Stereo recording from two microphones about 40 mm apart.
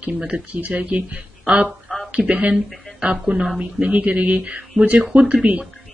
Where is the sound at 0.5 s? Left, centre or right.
Right.